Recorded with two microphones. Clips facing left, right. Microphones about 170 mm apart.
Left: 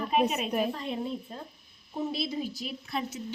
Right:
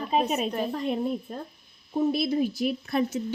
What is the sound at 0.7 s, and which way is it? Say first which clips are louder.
Speech: right 6 dB; 50° right (ahead or behind).